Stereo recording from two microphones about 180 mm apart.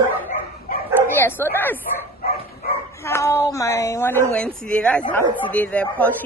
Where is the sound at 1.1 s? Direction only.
10° left (ahead or behind).